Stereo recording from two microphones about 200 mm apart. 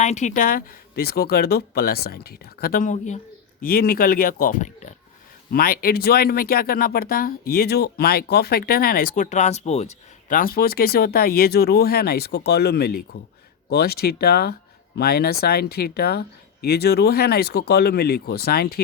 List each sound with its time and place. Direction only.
0.0 s speech: 35° left (ahead or behind)
3.6 s speech: 50° left (ahead or behind)
5.5 s speech: 50° left (ahead or behind)